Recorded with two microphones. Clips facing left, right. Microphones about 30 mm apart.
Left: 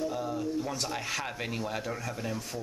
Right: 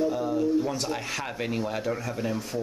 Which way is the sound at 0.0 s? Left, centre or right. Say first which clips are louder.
Right 7 dB; centre.